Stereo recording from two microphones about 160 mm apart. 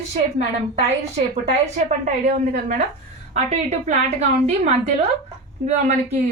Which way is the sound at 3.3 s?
45° right (ahead or behind).